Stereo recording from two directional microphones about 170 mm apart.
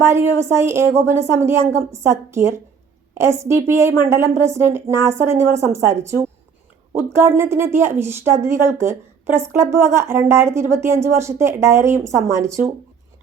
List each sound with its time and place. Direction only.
0.1 s speech: 15° right (ahead or behind)